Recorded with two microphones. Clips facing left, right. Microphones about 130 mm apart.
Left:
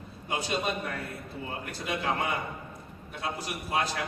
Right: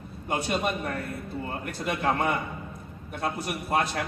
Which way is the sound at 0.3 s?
55° right (ahead or behind).